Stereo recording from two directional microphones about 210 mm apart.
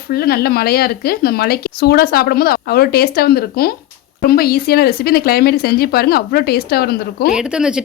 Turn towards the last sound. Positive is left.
turn(degrees=-5)  # may be behind; listen again after turning